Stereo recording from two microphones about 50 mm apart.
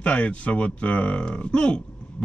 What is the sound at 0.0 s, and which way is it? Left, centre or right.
Speech, left.